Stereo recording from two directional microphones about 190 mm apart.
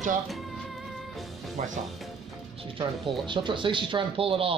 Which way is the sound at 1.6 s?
40° right (ahead or behind).